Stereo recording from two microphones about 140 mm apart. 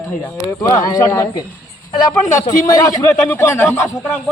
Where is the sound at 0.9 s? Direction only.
25° left (ahead or behind).